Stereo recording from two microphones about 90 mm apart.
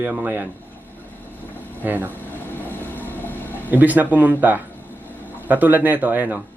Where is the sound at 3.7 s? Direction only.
20° right (ahead or behind).